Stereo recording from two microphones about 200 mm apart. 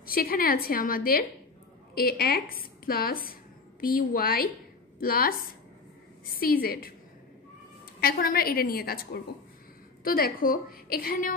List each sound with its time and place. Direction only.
0.0 s a woman's voice: 45° left (ahead or behind)
8.0 s a woman's voice: 50° left (ahead or behind)